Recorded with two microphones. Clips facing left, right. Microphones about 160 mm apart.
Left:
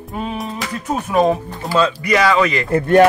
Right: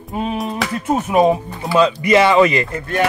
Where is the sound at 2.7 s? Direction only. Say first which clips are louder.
Left 10 dB; 55° left (ahead or behind).